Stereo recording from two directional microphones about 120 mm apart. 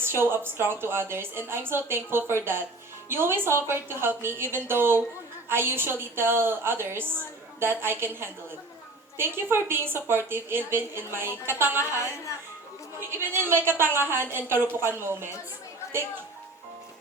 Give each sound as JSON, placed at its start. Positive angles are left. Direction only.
{"t": 0.0, "sound": "a woman's voice", "side_deg": -20}
{"t": 13.0, "sound": "a woman's voice", "side_deg": -20}